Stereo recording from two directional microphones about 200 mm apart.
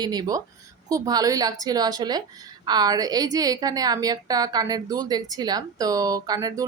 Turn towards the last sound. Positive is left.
turn(degrees=-20)  # may be behind; listen again after turning